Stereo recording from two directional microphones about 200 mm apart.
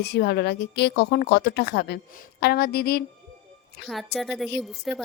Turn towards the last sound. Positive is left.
turn(degrees=0)  # may be behind; listen again after turning